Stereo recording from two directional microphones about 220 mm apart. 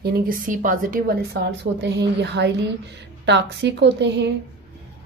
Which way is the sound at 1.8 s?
50° right (ahead or behind).